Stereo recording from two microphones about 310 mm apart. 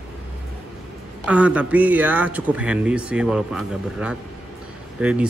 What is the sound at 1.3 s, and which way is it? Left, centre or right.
Speech, centre.